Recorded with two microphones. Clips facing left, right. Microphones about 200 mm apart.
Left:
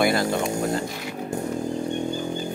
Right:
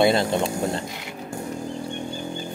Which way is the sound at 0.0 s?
25° right (ahead or behind).